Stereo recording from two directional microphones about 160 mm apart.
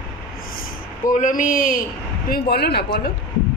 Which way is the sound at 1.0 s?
55° left (ahead or behind).